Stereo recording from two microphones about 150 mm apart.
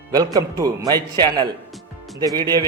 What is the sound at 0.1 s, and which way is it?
Speech, 25° right (ahead or behind).